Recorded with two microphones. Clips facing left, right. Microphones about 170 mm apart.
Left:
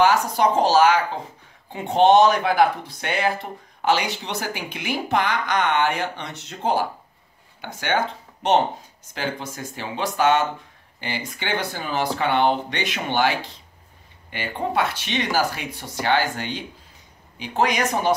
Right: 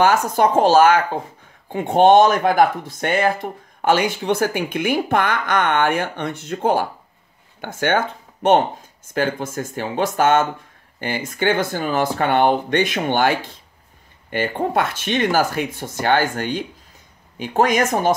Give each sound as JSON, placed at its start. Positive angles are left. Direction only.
{"t": 0.0, "sound": "speech", "side_deg": -50}